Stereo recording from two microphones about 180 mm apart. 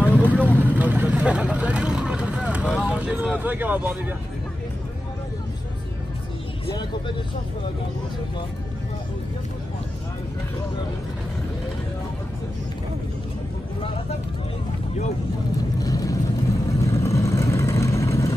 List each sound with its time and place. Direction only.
0.0 s vehicle: 10° right (ahead or behind)
6.6 s speech: 25° left (ahead or behind)
15.8 s vehicle: 20° left (ahead or behind)